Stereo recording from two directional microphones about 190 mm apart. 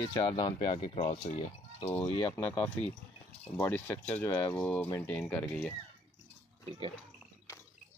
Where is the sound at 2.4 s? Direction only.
10° left (ahead or behind).